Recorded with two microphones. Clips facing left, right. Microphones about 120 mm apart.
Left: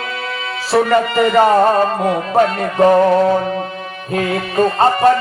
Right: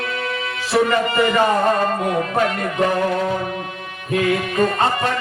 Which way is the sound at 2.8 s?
40° left (ahead or behind).